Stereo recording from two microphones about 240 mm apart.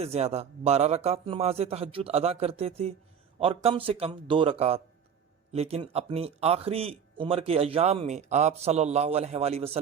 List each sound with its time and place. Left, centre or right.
0.0 s a man's voice: right